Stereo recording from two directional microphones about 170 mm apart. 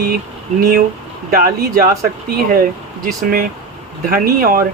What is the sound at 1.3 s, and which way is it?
Speech, 55° right (ahead or behind).